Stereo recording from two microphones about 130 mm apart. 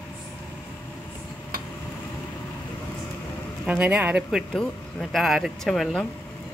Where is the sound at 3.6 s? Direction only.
10° right (ahead or behind).